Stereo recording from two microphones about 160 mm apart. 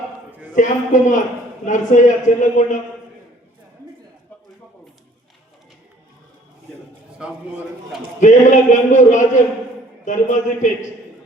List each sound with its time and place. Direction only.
0.5 s a man's voice: 50° left (ahead or behind)
7.2 s a man's voice: 5° right (ahead or behind)
8.2 s a man's voice: 50° left (ahead or behind)